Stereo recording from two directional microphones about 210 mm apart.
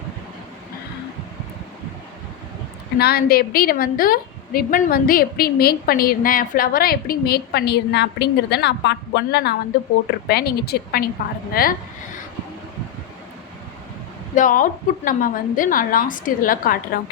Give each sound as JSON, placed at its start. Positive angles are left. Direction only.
{"t": 3.0, "sound": "a woman's voice", "side_deg": 45}
{"t": 14.3, "sound": "a woman's voice", "side_deg": 40}